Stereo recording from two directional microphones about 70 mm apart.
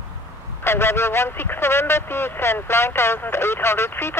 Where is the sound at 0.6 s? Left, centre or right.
Left.